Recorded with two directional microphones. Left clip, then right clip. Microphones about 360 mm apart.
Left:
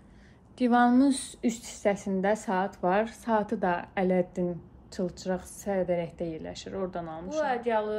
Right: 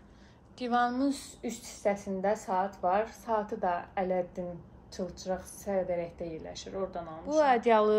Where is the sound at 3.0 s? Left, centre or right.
Left.